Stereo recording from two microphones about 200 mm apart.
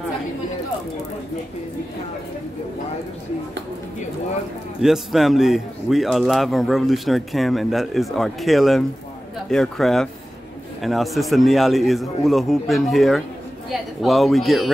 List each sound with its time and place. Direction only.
4.8 s a man's voice: centre (ahead or behind)